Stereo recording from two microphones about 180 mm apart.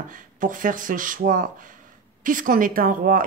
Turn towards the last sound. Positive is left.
turn(degrees=-50)  # may be behind; listen again after turning